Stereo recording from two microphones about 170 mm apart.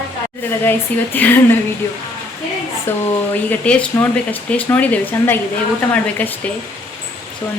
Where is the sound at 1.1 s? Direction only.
10° left (ahead or behind).